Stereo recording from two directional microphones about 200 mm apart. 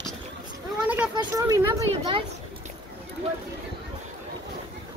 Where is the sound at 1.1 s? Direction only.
15° right (ahead or behind).